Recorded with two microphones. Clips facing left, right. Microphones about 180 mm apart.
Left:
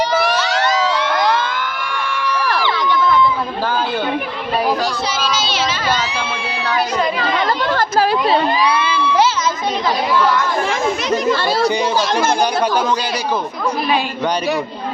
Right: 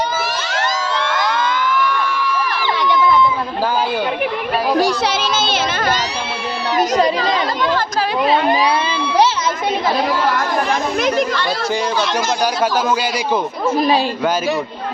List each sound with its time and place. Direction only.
0.1 s a sound: 65° left (ahead or behind)
1.3 s a sound: 50° left (ahead or behind); by 2.5 s 75° left (ahead or behind)
5.0 s child singing: 55° right (ahead or behind)
6.7 s children playing: 40° right (ahead or behind)
8.6 s crowd: 30° right (ahead or behind)
10.2 s speech: 50° right (ahead or behind)
13.7 s speech: 40° right (ahead or behind)